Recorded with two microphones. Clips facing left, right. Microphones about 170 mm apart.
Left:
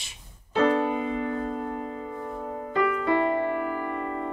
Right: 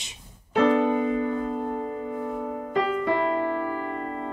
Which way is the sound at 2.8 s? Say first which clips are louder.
Even; 25° right (ahead or behind).